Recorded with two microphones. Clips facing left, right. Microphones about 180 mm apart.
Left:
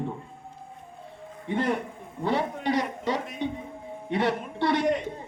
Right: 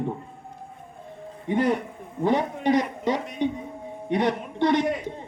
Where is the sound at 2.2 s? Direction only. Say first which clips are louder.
Right 4 dB; 15° right (ahead or behind).